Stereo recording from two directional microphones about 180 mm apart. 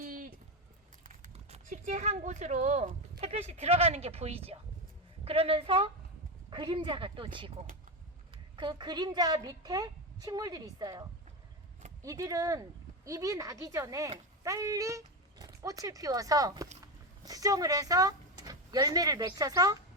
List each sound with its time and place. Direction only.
0.0 s a sound: 50° right (ahead or behind)
1.0 s a woman's voice: 40° right (ahead or behind); by 11.0 s 20° right (ahead or behind)
12.0 s a woman's voice: 20° right (ahead or behind)